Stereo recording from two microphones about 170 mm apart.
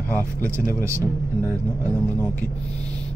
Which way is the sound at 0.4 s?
15° right (ahead or behind).